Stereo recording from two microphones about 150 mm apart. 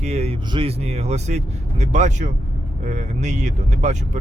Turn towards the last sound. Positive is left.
turn(degrees=-50)  # may be behind; listen again after turning